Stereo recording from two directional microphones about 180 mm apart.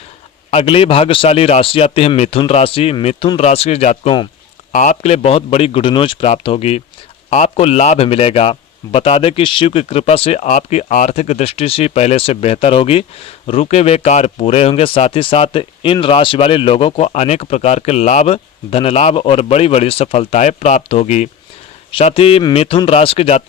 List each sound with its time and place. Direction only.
0.5 s speech: 30° left (ahead or behind)
4.7 s speech: 45° left (ahead or behind)